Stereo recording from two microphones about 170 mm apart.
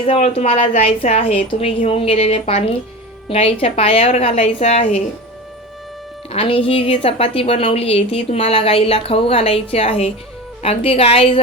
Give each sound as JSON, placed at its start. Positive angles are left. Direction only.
{"t": 0.0, "sound": "a woman's voice", "side_deg": 35}
{"t": 6.3, "sound": "a woman's voice", "side_deg": 30}